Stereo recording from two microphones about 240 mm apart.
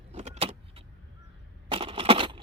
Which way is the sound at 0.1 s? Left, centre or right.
Right.